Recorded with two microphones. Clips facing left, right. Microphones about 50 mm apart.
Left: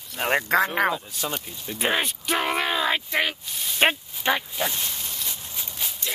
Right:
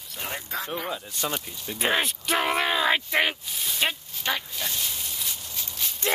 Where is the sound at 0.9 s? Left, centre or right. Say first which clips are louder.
Left 1 dB; centre.